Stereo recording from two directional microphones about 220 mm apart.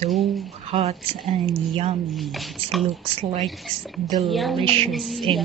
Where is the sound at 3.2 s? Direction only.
35° right (ahead or behind).